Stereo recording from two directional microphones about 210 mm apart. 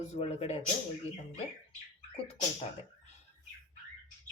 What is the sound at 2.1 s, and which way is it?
Speech, 30° left (ahead or behind).